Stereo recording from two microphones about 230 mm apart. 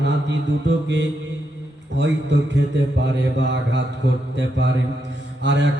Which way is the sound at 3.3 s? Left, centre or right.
Right.